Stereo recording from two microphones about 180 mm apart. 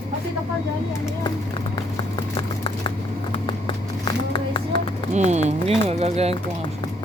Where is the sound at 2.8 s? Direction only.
25° left (ahead or behind).